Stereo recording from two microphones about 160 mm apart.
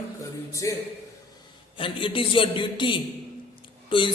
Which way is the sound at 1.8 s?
35° left (ahead or behind).